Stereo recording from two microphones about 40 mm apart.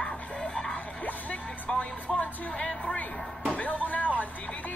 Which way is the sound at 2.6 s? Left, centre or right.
Left.